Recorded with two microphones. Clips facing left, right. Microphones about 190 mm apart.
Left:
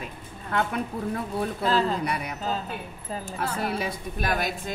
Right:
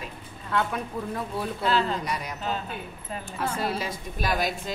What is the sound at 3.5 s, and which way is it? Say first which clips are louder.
A woman's voice: even; 60° left (ahead or behind).